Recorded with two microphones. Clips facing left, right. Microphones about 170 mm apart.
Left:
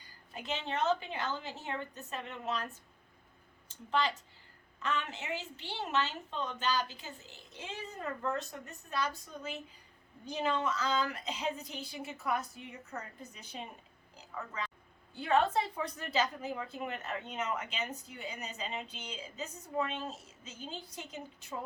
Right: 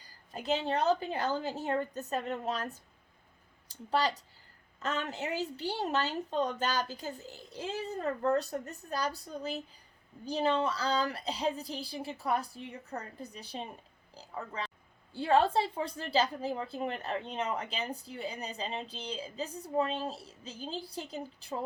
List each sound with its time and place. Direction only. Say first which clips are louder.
0.0 s a woman's voice: right 5 dB; 40° right (ahead or behind)